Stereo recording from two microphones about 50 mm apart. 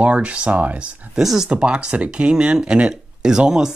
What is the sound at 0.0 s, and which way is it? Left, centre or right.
Speech, right.